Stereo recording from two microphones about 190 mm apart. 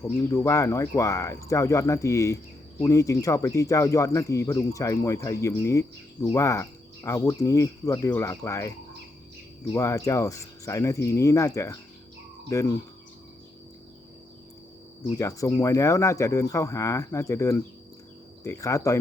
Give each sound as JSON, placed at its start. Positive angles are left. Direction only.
{"t": 0.0, "sound": "speech", "side_deg": 15}
{"t": 9.7, "sound": "speech", "side_deg": 15}
{"t": 15.2, "sound": "speech", "side_deg": 15}